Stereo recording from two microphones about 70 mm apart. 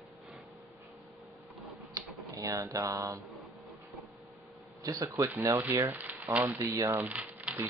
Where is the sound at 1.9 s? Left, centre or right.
Right.